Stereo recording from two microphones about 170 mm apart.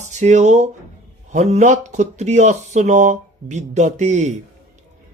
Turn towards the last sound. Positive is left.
turn(degrees=-45)  # may be behind; listen again after turning